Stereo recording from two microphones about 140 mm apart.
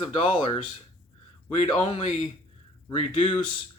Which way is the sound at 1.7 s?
40° left (ahead or behind).